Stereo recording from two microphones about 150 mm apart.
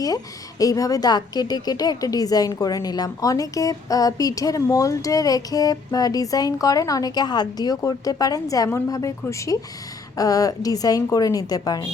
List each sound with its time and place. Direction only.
0.6 s a woman's voice: 25° left (ahead or behind)